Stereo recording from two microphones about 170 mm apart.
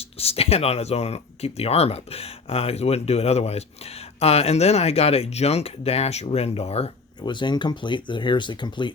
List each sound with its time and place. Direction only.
0.2 s speech: 35° left (ahead or behind)
7.2 s speech: 25° left (ahead or behind)